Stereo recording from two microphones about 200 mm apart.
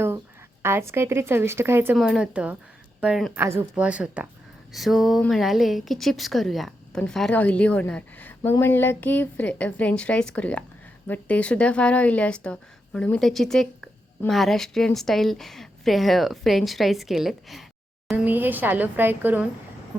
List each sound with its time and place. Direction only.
0.6 s a woman's voice: 10° right (ahead or behind)